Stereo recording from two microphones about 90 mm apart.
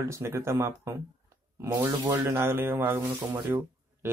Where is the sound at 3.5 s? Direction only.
25° right (ahead or behind).